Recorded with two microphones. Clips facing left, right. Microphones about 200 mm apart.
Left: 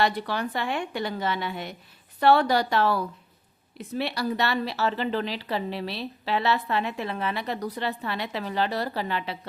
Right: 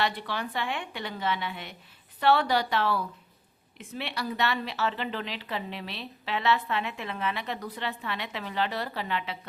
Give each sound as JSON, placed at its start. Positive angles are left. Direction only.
{"t": 0.0, "sound": "speech", "side_deg": 40}